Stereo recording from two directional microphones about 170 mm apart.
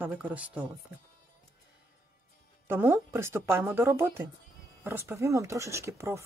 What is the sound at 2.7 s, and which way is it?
Speech, 15° right (ahead or behind).